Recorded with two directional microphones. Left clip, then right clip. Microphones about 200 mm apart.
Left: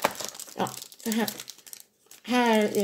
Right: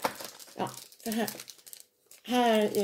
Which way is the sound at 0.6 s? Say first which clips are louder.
Left 4 dB; 10° left (ahead or behind).